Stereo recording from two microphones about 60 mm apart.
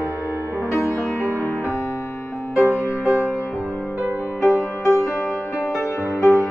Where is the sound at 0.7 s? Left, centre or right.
Left.